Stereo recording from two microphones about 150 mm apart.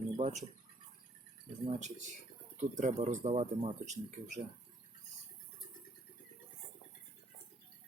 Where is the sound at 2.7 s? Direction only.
55° right (ahead or behind).